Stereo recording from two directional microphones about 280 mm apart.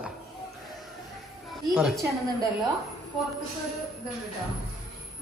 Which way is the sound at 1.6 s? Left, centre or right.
Centre.